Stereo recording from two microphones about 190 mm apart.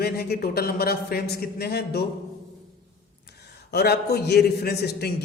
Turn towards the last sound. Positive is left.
turn(degrees=60)  # may be behind; listen again after turning